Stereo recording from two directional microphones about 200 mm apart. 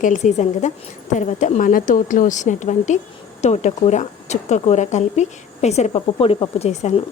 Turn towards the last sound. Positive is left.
turn(degrees=30)  # may be behind; listen again after turning